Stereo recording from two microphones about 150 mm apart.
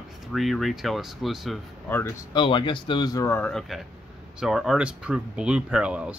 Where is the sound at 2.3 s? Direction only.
35° left (ahead or behind).